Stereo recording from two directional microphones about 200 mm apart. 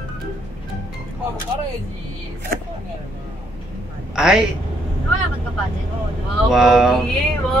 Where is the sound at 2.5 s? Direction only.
50° right (ahead or behind).